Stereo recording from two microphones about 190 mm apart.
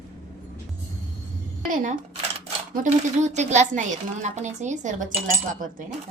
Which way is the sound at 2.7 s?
40° right (ahead or behind).